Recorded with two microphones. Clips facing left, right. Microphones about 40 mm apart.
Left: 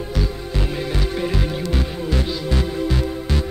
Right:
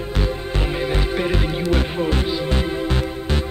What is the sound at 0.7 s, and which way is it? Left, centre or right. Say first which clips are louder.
Music: right 4 dB; right.